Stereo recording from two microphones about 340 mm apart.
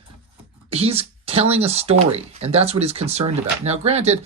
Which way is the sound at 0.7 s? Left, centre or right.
Centre.